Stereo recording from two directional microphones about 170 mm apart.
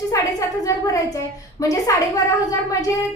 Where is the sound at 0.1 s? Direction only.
20° left (ahead or behind).